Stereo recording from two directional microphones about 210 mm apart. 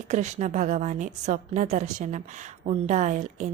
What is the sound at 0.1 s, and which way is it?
A woman's voice, 35° right (ahead or behind).